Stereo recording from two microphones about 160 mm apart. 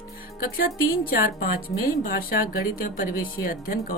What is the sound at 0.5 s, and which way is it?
A woman's voice, 65° left (ahead or behind).